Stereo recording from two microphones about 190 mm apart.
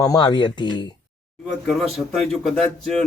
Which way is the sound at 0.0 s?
20° left (ahead or behind).